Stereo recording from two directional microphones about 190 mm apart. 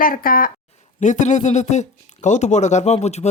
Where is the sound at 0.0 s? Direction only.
50° left (ahead or behind).